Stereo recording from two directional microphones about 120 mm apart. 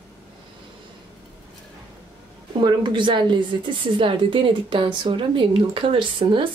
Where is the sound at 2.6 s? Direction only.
40° right (ahead or behind).